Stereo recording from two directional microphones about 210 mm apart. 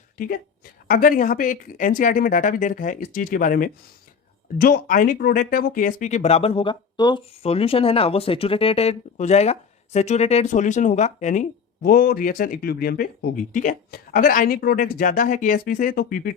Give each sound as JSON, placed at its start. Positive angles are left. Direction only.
{"t": 0.2, "sound": "speech", "side_deg": 45}